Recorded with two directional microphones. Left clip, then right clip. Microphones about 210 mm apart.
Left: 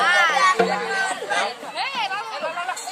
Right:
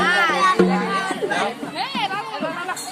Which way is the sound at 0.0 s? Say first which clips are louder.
Even; 10° left (ahead or behind).